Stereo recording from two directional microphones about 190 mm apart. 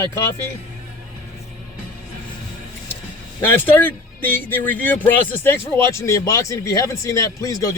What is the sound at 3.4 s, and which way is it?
Speech, 10° left (ahead or behind).